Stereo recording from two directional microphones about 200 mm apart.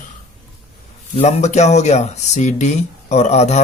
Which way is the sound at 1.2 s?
35° left (ahead or behind).